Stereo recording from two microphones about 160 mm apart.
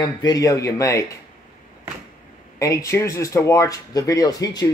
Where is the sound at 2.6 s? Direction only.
20° left (ahead or behind).